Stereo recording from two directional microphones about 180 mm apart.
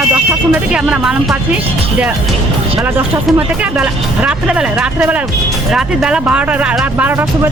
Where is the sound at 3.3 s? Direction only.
5° right (ahead or behind).